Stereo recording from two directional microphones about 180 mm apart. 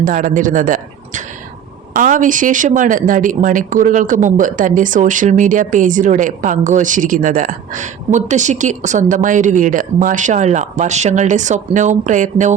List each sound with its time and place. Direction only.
0.0 s a man's voice: 45° right (ahead or behind)